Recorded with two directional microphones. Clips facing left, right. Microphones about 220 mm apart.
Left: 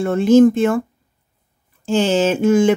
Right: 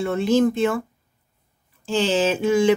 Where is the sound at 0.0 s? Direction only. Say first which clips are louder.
Left 7 dB; 50° left (ahead or behind).